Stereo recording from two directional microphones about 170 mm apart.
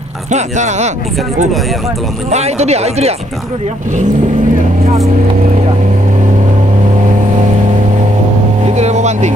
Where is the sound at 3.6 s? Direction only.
45° right (ahead or behind).